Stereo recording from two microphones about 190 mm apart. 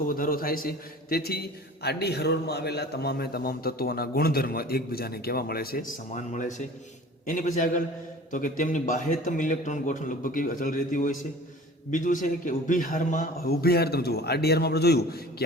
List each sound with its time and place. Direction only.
0.0 s a man's voice: 50° left (ahead or behind)
7.3 s a man's voice: 45° left (ahead or behind)